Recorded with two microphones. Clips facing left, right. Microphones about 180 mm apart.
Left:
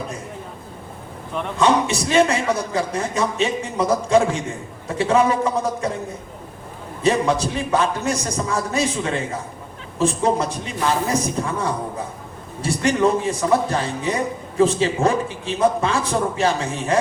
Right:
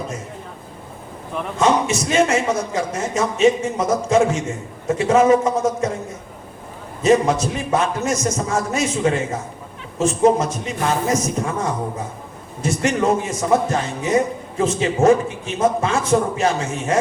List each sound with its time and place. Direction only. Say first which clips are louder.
1.6 s a man's voice: right 1 dB; 35° left (ahead or behind)
7.0 s a man's voice: right 3 dB; 35° left (ahead or behind)